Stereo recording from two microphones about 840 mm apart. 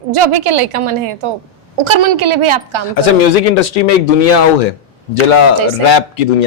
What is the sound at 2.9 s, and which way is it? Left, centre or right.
A man's voice, left.